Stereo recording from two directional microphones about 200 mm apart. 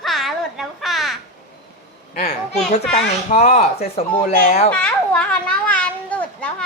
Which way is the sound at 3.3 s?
35° left (ahead or behind).